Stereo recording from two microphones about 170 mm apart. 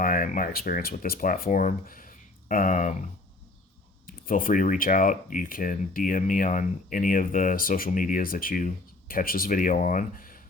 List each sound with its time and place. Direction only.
0.0 s speech: 55° left (ahead or behind)
4.0 s speech: 55° left (ahead or behind)